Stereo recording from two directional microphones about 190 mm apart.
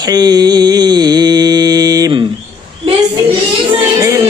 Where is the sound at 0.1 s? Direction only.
20° right (ahead or behind).